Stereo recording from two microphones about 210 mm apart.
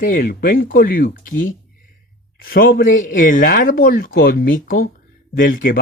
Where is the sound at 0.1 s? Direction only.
40° left (ahead or behind).